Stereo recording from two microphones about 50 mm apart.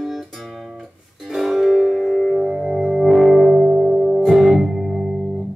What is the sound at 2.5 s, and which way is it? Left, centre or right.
Music, centre.